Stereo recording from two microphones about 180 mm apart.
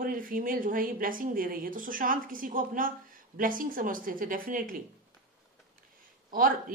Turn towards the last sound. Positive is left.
turn(degrees=-50)  # may be behind; listen again after turning